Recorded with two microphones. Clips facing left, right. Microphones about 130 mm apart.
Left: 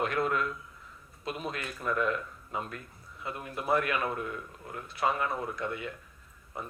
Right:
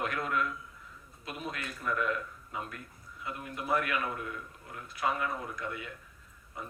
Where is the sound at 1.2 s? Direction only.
30° left (ahead or behind).